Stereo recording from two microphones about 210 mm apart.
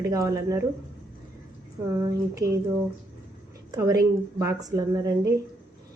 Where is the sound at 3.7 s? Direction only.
15° right (ahead or behind).